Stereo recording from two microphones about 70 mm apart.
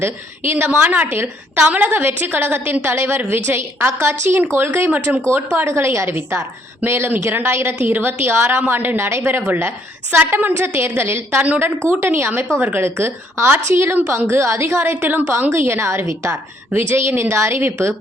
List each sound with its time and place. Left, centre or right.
0.0 s a woman's voice: right
5.6 s a woman's voice: right